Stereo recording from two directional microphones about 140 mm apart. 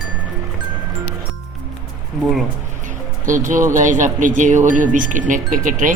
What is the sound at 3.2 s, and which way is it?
Speech, 70° right (ahead or behind).